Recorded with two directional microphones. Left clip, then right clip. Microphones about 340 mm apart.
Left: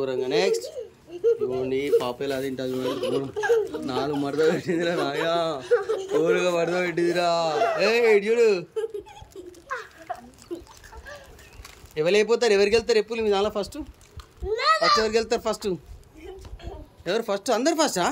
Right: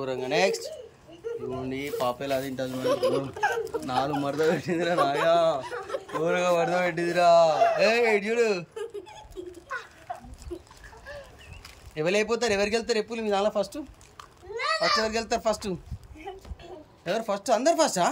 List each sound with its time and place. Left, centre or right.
0.0 s a man's voice: centre
2.9 s speech: centre
3.8 s a man's voice: centre
5.6 s speech: centre
5.9 s speech: centre
9.7 s a sound: centre
11.9 s a man's voice: centre
14.5 s a sound: centre
15.0 s a man's voice: centre
17.0 s a man's voice: centre